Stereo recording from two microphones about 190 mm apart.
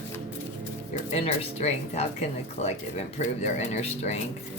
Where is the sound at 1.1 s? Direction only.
35° left (ahead or behind).